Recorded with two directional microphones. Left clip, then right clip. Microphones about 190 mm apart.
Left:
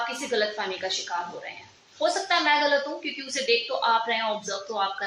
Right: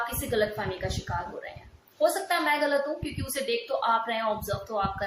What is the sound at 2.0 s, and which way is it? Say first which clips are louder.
A woman's voice: left 1 dB; 20° right (ahead or behind).